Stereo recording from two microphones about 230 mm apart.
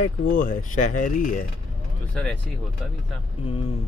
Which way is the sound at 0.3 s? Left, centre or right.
Left.